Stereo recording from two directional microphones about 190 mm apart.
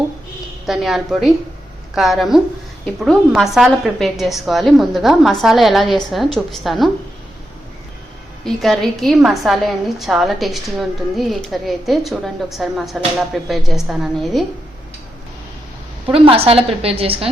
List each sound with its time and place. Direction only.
0.7 s a woman's voice: centre (ahead or behind)
8.4 s a woman's voice: centre (ahead or behind)
16.1 s a woman's voice: 30° right (ahead or behind)